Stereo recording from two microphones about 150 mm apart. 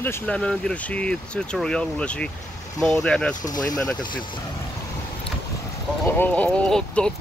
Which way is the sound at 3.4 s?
25° left (ahead or behind).